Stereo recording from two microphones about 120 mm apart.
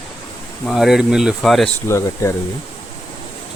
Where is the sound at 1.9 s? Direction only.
25° left (ahead or behind).